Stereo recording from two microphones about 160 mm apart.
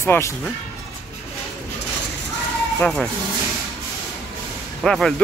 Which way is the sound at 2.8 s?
Centre (ahead or behind).